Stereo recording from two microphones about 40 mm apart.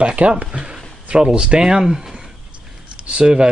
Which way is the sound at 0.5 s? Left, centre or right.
Right.